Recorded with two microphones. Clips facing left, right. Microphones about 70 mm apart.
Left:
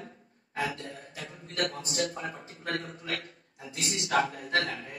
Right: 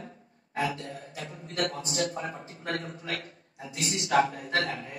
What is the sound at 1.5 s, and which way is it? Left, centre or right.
A man's voice, right.